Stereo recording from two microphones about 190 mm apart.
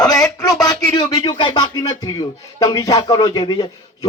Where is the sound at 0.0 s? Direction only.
20° left (ahead or behind).